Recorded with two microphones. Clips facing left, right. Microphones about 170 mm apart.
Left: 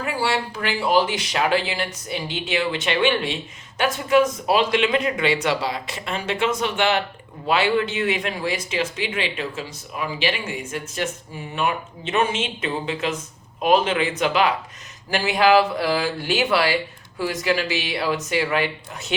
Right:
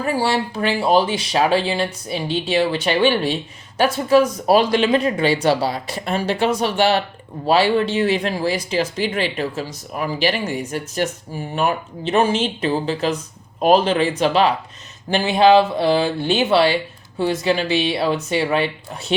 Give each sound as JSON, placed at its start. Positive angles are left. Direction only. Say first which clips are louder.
{"t": 0.0, "sound": "speech", "louder": "right 4 dB", "side_deg": -35}